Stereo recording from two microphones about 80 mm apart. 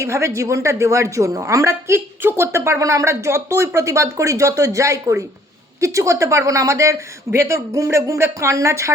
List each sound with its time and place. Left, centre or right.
0.0 s a woman's voice: right